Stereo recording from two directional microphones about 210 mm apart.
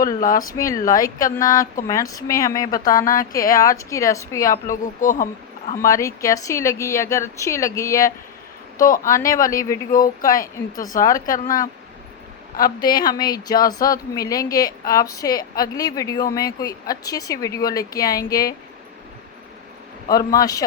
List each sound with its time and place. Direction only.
0.2 s speech: 40° left (ahead or behind)
0.5 s a woman's voice: 15° left (ahead or behind)
2.7 s speech: 40° left (ahead or behind)
3.6 s a woman's voice: 15° left (ahead or behind)
4.7 s speech: 40° left (ahead or behind)
5.8 s a woman's voice: 15° left (ahead or behind)
8.8 s speech: 40° left (ahead or behind)
9.2 s a woman's voice: 15° left (ahead or behind)
10.9 s speech: 45° left (ahead or behind)
11.4 s a woman's voice: 15° left (ahead or behind)
13.1 s a woman's voice: 20° left (ahead or behind)
20.1 s a woman's voice: 15° left (ahead or behind)